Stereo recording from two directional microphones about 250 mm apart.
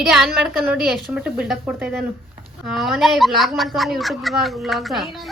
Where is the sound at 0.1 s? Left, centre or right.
Centre.